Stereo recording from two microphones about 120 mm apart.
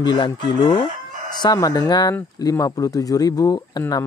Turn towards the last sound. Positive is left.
turn(degrees=30)  # may be behind; listen again after turning